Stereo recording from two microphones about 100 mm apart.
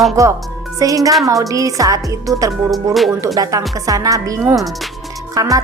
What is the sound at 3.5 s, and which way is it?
Speech, 35° right (ahead or behind).